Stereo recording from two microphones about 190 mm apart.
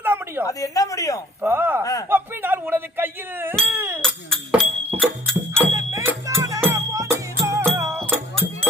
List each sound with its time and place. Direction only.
0.0 s a sound: 10° right (ahead or behind)
0.4 s speech: 15° left (ahead or behind)
1.4 s speech: 10° right (ahead or behind)
1.8 s speech: 15° left (ahead or behind)
2.0 s speech: 10° right (ahead or behind)
3.6 s baby cry: 10° right (ahead or behind)
4.0 s a sound: 5° left (ahead or behind)
4.9 s music: 5° left (ahead or behind)
5.7 s music: 15° right (ahead or behind)